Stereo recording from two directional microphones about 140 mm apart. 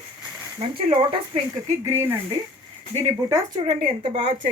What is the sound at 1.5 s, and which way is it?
Speech, 20° right (ahead or behind).